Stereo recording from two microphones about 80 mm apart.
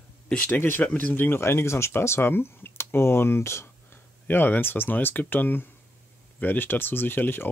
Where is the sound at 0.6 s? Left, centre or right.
Left.